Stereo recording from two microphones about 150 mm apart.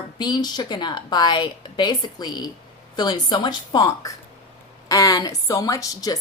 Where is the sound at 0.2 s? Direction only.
30° left (ahead or behind).